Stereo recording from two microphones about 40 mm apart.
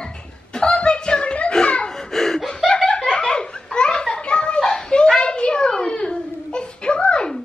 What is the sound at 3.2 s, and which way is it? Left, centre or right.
Children playing, left.